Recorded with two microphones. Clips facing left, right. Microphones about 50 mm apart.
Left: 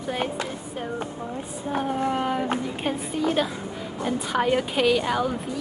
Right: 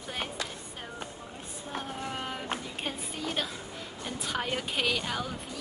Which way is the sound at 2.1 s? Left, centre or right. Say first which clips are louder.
Left 10 dB; centre.